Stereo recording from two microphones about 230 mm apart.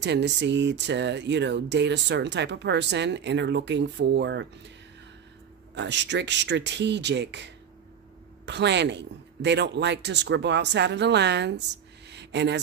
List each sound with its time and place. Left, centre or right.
0.0 s speech: right
5.8 s speech: right
12.1 s a sound: right